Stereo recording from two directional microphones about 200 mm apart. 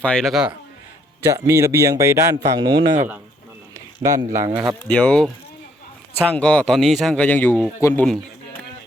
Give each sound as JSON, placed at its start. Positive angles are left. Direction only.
{"t": 0.0, "sound": "speech", "side_deg": 5}
{"t": 1.2, "sound": "speech", "side_deg": -15}
{"t": 4.0, "sound": "speech", "side_deg": -15}
{"t": 4.9, "sound": "speech", "side_deg": 5}
{"t": 6.3, "sound": "speech", "side_deg": 5}